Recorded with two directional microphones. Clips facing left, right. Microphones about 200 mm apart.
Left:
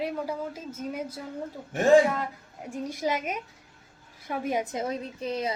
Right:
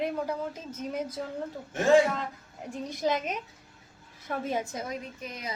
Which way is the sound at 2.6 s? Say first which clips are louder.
Even; 10° left (ahead or behind).